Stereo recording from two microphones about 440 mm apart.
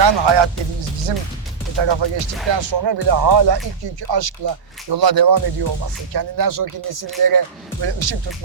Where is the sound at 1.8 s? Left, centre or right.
Right.